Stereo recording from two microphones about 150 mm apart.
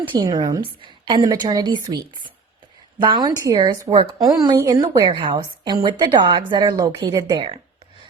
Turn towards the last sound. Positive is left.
turn(degrees=-30)  # may be behind; listen again after turning